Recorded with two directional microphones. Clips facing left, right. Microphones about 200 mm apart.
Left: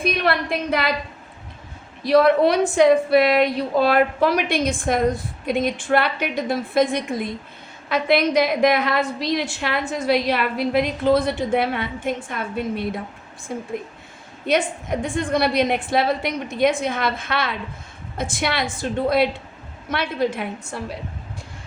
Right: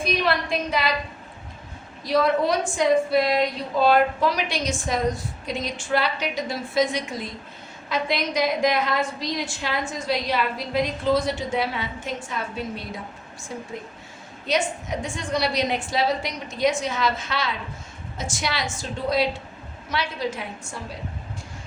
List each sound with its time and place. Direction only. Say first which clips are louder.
0.0 s a woman's voice: left 2 dB; 60° left (ahead or behind)
2.0 s a woman's voice: left 6 dB; 65° left (ahead or behind)